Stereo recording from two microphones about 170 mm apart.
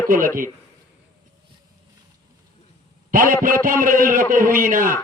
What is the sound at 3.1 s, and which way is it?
A man's voice, 55° right (ahead or behind).